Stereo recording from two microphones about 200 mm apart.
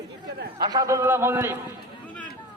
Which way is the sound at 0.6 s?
20° right (ahead or behind).